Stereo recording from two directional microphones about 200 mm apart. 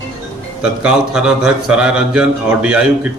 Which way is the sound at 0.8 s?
5° right (ahead or behind).